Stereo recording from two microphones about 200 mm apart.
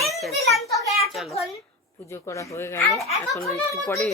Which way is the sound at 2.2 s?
15° left (ahead or behind).